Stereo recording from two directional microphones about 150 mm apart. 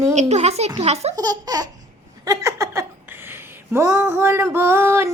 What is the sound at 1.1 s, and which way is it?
Child singing, 25° right (ahead or behind).